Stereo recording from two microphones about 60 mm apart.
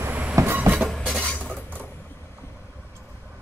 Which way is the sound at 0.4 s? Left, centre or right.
Right.